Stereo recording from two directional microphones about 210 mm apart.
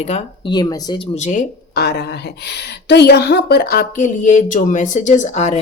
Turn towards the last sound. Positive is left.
turn(degrees=35)  # may be behind; listen again after turning